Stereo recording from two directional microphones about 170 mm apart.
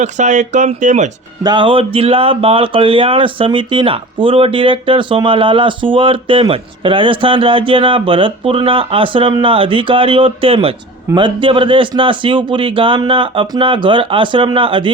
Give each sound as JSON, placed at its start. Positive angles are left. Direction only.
{"t": 0.0, "sound": "speech", "side_deg": -45}
{"t": 1.5, "sound": "speech", "side_deg": -30}